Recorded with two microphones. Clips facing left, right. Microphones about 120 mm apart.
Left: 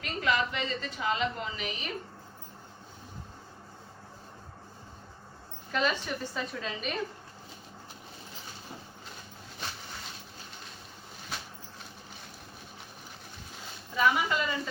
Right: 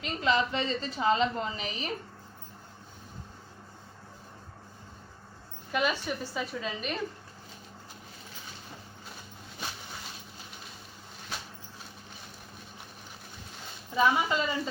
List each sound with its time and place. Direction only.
0.0 s a woman's voice: 25° right (ahead or behind)
5.7 s a woman's voice: 10° right (ahead or behind)
13.9 s a woman's voice: 25° right (ahead or behind)